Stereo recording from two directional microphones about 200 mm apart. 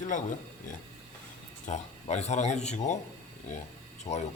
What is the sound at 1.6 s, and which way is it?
Speech, 35° left (ahead or behind).